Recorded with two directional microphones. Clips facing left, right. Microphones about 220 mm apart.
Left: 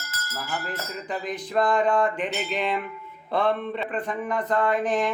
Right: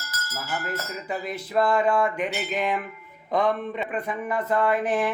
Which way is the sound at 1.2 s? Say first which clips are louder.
Even; 5° right (ahead or behind).